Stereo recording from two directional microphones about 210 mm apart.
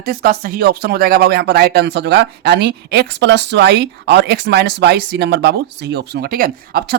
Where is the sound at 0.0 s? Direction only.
45° right (ahead or behind).